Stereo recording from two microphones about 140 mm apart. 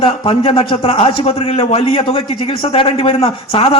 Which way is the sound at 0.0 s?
45° left (ahead or behind).